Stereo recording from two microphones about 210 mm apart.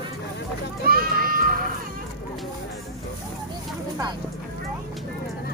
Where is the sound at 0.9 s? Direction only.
45° right (ahead or behind).